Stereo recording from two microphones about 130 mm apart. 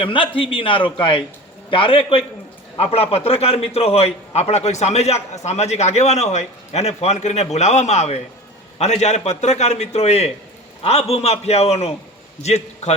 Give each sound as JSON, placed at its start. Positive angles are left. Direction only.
{"t": 0.0, "sound": "a man's voice", "side_deg": 40}